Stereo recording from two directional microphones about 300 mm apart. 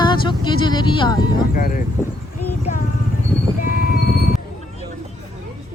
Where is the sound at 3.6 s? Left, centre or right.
Left.